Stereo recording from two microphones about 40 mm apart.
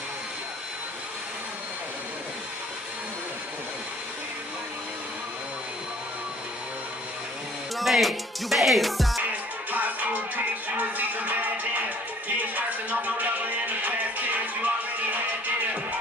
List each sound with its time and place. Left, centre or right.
7.7 s music: centre
9.7 s music: right